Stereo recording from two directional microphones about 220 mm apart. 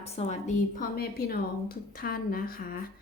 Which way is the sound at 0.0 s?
30° left (ahead or behind).